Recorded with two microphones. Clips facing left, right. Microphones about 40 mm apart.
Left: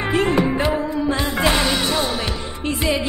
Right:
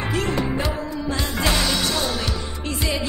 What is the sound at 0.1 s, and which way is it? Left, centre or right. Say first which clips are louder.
Music: left 7 dB; left.